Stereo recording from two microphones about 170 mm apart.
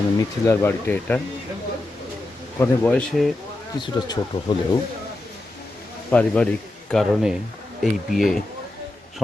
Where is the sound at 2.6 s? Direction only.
10° left (ahead or behind).